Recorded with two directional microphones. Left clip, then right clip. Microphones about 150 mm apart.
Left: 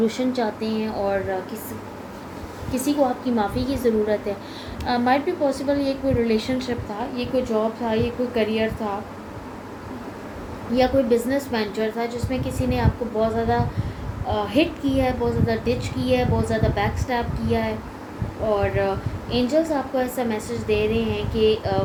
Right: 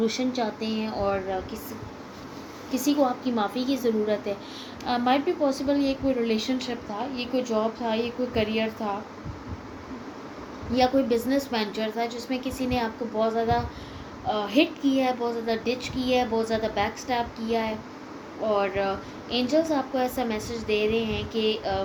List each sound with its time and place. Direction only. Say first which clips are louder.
0.0 s a woman's voice: left 4 dB; 40° right (ahead or behind)
3.3 s a woman's voice: left 3 dB; 50° right (ahead or behind)
10.8 s a woman's voice: left 4 dB; 55° right (ahead or behind)